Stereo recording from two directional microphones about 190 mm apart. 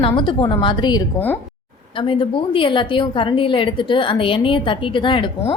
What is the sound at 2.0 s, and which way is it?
A woman's voice, 25° left (ahead or behind).